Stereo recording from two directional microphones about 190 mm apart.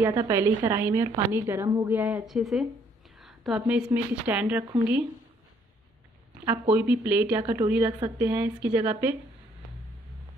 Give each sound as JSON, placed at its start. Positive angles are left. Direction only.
{"t": 0.0, "sound": "a woman's voice", "side_deg": -15}
{"t": 6.7, "sound": "a woman's voice", "side_deg": -10}